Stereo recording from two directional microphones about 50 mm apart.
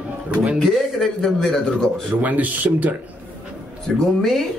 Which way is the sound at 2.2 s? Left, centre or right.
Right.